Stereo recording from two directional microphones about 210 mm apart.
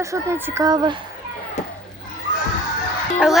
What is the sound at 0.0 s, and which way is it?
Speech, 15° right (ahead or behind).